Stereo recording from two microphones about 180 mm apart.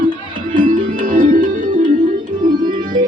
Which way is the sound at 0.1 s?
50° right (ahead or behind).